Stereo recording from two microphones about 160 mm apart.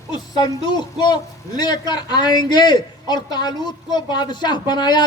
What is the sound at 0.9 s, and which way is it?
A woman's voice, 25° left (ahead or behind).